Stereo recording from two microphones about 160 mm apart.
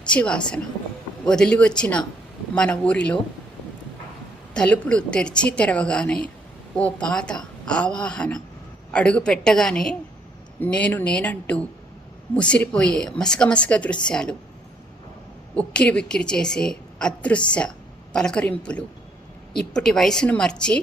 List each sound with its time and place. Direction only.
0.0 s a woman's voice: 5° left (ahead or behind)
4.5 s a woman's voice: 5° left (ahead or behind)
15.5 s a woman's voice: 5° left (ahead or behind)